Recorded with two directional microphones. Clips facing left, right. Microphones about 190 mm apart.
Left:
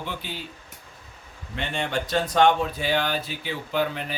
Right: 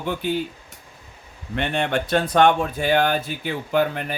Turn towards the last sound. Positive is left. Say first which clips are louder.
# right 5 dB
turn(degrees=-50)  # may be behind; listen again after turning